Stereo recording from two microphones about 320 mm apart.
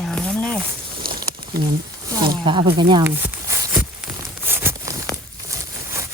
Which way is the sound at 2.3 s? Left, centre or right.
Centre.